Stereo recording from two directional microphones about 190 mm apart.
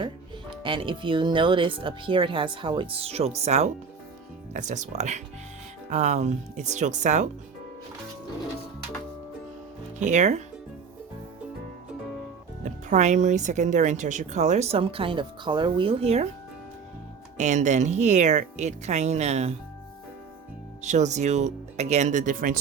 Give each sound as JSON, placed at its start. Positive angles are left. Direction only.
{"t": 0.6, "sound": "a woman's voice", "side_deg": -25}
{"t": 10.0, "sound": "a woman's voice", "side_deg": -40}
{"t": 12.9, "sound": "a woman's voice", "side_deg": -40}
{"t": 17.3, "sound": "a woman's voice", "side_deg": -40}
{"t": 20.8, "sound": "a woman's voice", "side_deg": -40}